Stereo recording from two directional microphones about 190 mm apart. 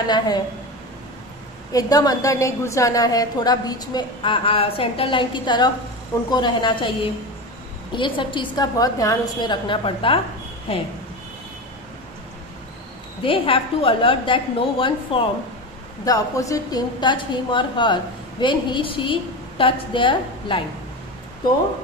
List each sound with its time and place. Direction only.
0.0 s a woman's voice: 20° left (ahead or behind)
1.7 s a woman's voice: 20° left (ahead or behind)
13.2 s a woman's voice: 25° left (ahead or behind)